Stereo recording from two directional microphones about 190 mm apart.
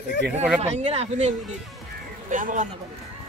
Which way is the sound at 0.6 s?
35° right (ahead or behind).